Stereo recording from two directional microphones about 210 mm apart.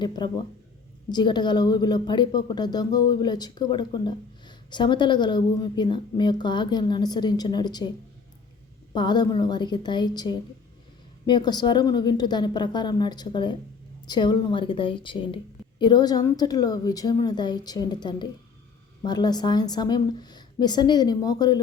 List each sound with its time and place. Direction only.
0.2 s speech: 20° left (ahead or behind)
8.9 s speech: 20° left (ahead or behind)